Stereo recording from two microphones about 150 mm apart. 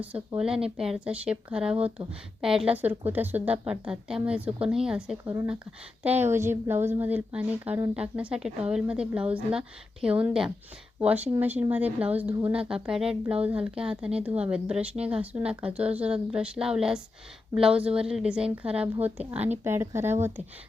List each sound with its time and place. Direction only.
0.3 s a woman's voice: 5° right (ahead or behind)